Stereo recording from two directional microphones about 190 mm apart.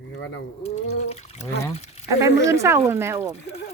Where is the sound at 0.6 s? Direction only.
35° left (ahead or behind).